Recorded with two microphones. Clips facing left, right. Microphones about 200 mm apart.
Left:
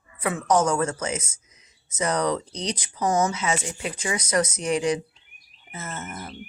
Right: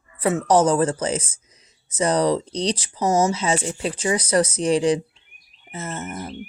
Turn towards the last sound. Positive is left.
turn(degrees=-30)  # may be behind; listen again after turning